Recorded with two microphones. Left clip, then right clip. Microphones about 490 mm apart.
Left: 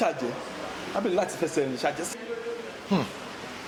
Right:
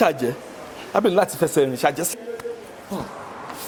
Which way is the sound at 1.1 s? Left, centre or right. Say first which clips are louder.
Right 7 dB; right.